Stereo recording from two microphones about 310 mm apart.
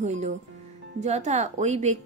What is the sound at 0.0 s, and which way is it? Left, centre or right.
Speech, right.